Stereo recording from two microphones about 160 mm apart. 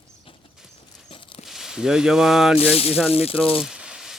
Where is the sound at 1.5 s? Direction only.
5° right (ahead or behind).